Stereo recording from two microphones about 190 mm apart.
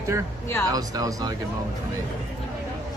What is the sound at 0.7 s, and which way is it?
Speech, 20° right (ahead or behind).